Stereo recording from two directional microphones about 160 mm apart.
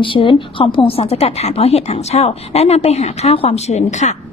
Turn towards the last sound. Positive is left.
turn(degrees=45)  # may be behind; listen again after turning